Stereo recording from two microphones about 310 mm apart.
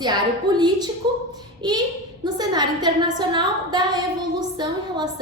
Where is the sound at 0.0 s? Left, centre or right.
Centre.